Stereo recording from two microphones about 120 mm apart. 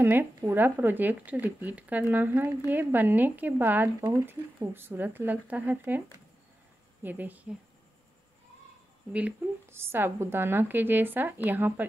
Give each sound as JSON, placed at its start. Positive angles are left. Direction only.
{"t": 0.0, "sound": "speech", "side_deg": -15}
{"t": 9.1, "sound": "speech", "side_deg": -15}